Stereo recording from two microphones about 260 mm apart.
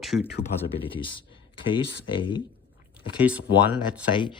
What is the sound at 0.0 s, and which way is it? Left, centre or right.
Speech, centre.